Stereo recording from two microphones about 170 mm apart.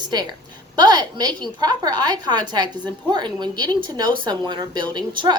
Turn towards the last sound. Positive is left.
turn(degrees=-25)  # may be behind; listen again after turning